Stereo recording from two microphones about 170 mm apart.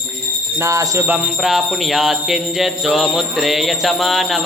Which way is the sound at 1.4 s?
Centre (ahead or behind).